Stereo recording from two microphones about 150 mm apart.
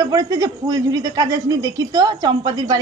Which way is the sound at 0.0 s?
25° right (ahead or behind).